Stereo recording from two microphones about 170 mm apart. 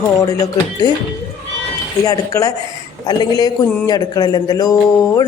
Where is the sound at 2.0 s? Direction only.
20° left (ahead or behind).